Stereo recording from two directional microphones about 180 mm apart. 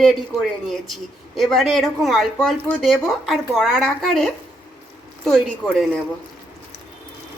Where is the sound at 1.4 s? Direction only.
Centre (ahead or behind).